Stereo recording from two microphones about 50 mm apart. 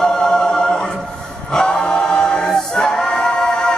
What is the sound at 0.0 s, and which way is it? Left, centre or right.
Music, centre.